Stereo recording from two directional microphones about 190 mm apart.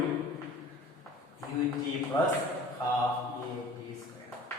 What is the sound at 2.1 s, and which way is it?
Speech, 20° left (ahead or behind).